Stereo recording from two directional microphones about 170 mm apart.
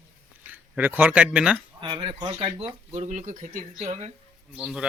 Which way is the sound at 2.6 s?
40° right (ahead or behind).